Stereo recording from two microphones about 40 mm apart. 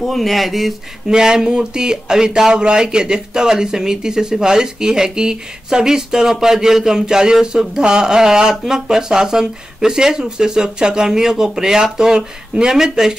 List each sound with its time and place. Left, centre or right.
0.0 s speech: centre
1.0 s speech: centre